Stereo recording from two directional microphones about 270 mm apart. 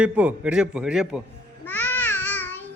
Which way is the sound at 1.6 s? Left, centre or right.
Centre.